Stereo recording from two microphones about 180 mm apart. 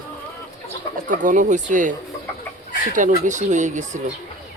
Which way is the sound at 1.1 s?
45° right (ahead or behind).